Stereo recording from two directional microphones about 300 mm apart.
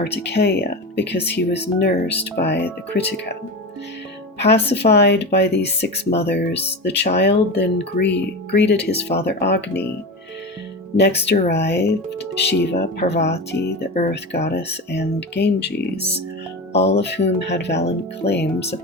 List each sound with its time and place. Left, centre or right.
0.0 s speech: left
4.7 s speech: left
11.2 s speech: left